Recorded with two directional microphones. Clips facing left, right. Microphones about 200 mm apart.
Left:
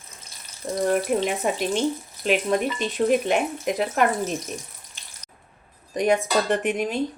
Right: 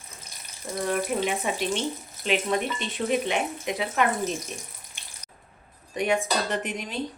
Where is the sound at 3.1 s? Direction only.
45° left (ahead or behind).